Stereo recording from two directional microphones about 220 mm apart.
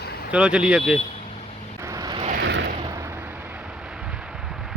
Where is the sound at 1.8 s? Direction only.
15° right (ahead or behind).